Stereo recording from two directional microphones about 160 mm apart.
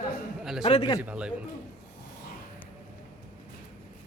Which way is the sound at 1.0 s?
5° right (ahead or behind).